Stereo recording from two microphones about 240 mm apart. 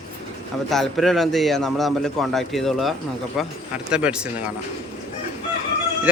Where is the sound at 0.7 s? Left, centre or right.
Centre.